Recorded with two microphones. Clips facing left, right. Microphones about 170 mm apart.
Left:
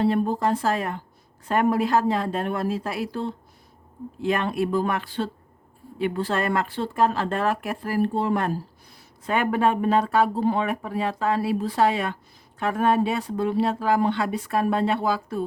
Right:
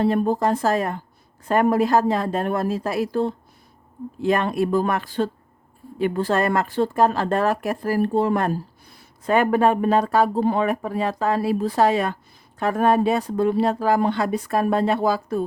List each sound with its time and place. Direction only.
0.0 s speech: 45° right (ahead or behind)